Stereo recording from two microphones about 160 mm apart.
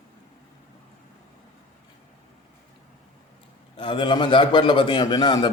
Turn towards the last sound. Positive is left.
turn(degrees=25)  # may be behind; listen again after turning